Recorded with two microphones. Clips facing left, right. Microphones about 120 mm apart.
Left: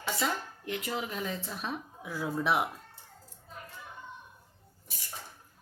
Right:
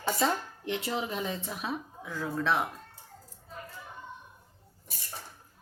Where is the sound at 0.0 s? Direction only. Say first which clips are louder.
Right 4 dB; 30° right (ahead or behind).